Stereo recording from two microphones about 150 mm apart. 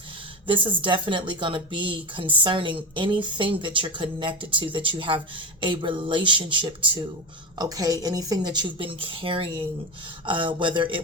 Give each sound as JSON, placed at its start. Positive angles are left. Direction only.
{"t": 0.4, "sound": "a woman's voice", "side_deg": -35}